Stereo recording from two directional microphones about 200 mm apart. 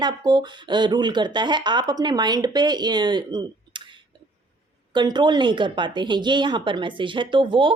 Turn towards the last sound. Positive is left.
turn(degrees=-25)  # may be behind; listen again after turning